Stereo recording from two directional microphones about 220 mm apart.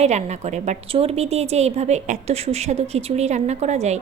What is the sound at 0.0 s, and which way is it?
A woman's voice, 30° right (ahead or behind).